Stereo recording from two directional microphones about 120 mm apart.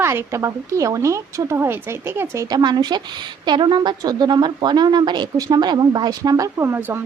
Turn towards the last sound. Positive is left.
turn(degrees=-20)  # may be behind; listen again after turning